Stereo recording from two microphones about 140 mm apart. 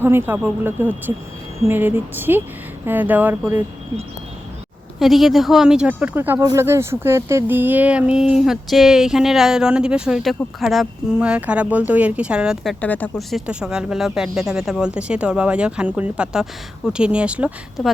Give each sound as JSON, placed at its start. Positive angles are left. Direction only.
{"t": 0.0, "sound": "speech", "side_deg": -15}
{"t": 4.9, "sound": "speech", "side_deg": 0}
{"t": 12.8, "sound": "speech", "side_deg": 10}
{"t": 13.1, "sound": "speech", "side_deg": -5}